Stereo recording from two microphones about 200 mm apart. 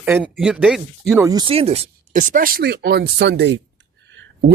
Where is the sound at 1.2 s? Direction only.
20° right (ahead or behind).